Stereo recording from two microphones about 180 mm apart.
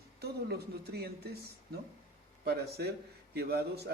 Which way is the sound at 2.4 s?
60° right (ahead or behind).